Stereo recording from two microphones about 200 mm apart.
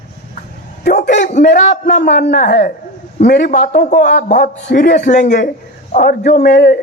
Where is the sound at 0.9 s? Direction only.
35° left (ahead or behind).